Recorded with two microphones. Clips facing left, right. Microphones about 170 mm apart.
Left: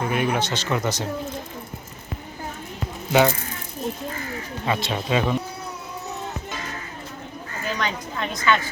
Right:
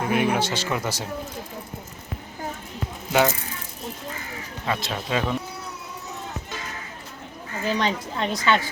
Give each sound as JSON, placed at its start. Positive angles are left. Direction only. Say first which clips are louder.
{"t": 0.0, "sound": "speech", "louder": "right 1 dB", "side_deg": -5}
{"t": 3.1, "sound": "speech", "louder": "left 2 dB", "side_deg": 0}
{"t": 4.6, "sound": "speech", "louder": "left 2 dB", "side_deg": 0}
{"t": 7.8, "sound": "speech", "louder": "right 1 dB", "side_deg": -30}